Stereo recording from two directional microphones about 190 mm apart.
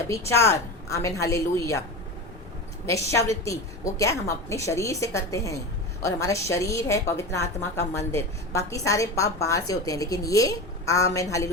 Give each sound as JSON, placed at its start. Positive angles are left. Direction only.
{"t": 0.1, "sound": "a woman's voice", "side_deg": 15}
{"t": 2.8, "sound": "a woman's voice", "side_deg": 15}